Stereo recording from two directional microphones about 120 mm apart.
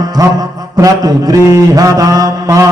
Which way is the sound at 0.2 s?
30° right (ahead or behind).